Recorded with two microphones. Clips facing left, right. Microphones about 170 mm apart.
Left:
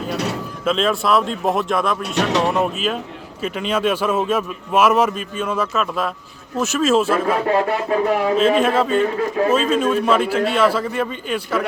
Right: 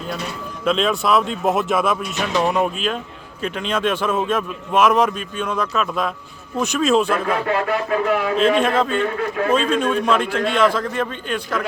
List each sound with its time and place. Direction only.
0.6 s a man's voice: centre (ahead or behind)
2.1 s speech: 75° left (ahead or behind)
2.5 s a man's voice: centre (ahead or behind)
7.4 s speech: 35° left (ahead or behind)
8.4 s a man's voice: 5° left (ahead or behind)